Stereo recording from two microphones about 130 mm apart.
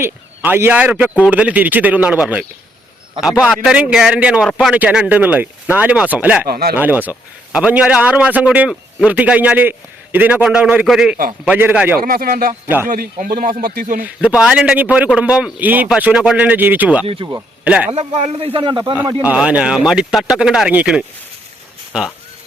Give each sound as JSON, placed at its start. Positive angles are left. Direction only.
{"t": 0.0, "sound": "a man's voice", "side_deg": -20}
{"t": 11.9, "sound": "speech", "side_deg": -90}
{"t": 12.6, "sound": "a man's voice", "side_deg": -15}
{"t": 12.9, "sound": "speech", "side_deg": -90}
{"t": 14.0, "sound": "a man's voice", "side_deg": -10}
{"t": 17.9, "sound": "speech", "side_deg": -55}
{"t": 19.2, "sound": "a man's voice", "side_deg": -10}